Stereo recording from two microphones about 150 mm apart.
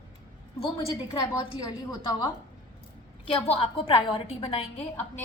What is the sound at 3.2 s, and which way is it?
A woman's voice, 40° left (ahead or behind).